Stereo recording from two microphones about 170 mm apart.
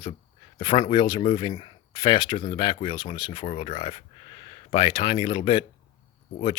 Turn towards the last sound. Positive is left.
turn(degrees=35)  # may be behind; listen again after turning